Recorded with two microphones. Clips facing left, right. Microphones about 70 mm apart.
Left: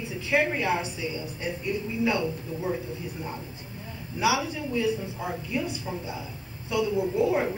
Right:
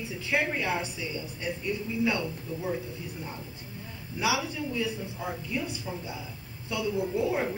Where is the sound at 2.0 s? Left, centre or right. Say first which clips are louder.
Left 5 dB; centre.